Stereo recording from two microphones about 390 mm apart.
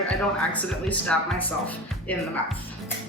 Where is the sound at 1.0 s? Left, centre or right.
Centre.